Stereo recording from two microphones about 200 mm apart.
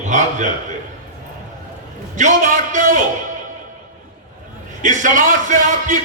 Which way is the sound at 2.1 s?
40° right (ahead or behind).